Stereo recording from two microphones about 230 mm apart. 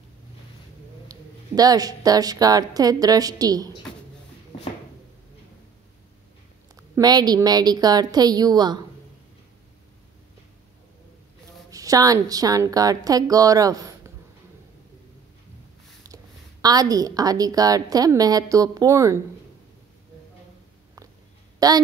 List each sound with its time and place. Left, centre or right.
1.0 s a woman's voice: centre
7.0 s a woman's voice: centre
11.7 s a woman's voice: centre
16.6 s a woman's voice: centre
21.5 s speech: centre